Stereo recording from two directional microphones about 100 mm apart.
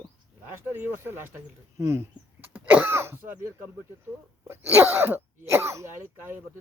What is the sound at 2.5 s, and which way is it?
Throat clearing, 20° right (ahead or behind).